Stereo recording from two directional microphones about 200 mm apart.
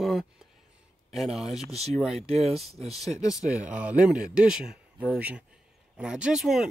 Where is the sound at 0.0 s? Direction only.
Centre (ahead or behind).